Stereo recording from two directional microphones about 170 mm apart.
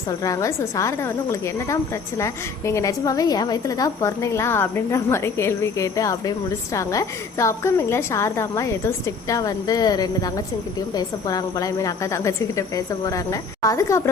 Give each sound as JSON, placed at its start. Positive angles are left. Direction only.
{"t": 0.2, "sound": "a woman's voice", "side_deg": 20}